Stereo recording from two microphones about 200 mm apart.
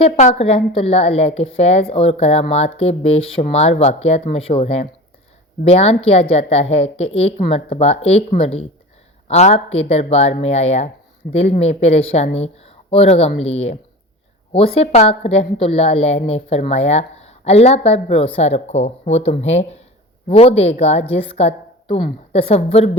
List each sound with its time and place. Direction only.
0.0 s a woman's voice: 35° left (ahead or behind)